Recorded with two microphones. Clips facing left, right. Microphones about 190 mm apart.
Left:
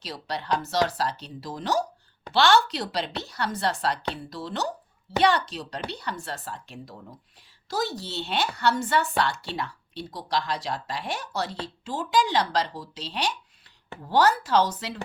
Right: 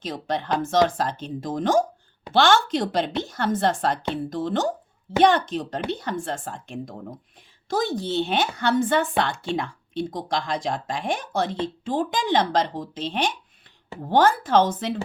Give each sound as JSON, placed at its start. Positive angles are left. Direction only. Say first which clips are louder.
{"t": 0.0, "sound": "speech", "louder": "right 6 dB", "side_deg": -50}